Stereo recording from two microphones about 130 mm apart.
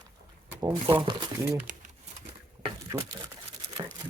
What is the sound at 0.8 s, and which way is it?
Speech, 40° right (ahead or behind).